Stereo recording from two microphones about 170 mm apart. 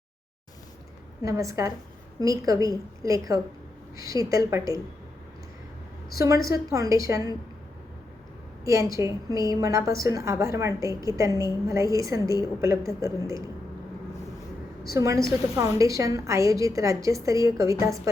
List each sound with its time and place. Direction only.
1.2 s a woman's voice: 20° right (ahead or behind)
6.1 s a woman's voice: 20° right (ahead or behind)
8.6 s a woman's voice: 20° right (ahead or behind)
14.9 s a woman's voice: 20° right (ahead or behind)